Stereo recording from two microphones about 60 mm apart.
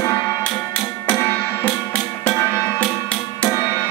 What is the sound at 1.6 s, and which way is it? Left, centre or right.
Music, left.